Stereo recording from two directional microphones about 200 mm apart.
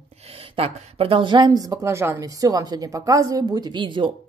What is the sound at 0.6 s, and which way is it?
A woman's voice, 30° right (ahead or behind).